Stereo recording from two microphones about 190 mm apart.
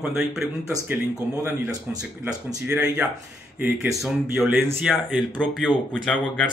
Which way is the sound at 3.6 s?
5° right (ahead or behind).